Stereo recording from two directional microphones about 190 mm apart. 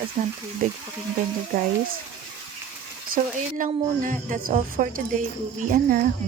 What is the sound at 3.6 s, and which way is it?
Speech, 45° right (ahead or behind).